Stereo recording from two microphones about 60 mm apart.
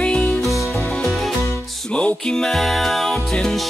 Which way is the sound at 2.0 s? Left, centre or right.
Centre.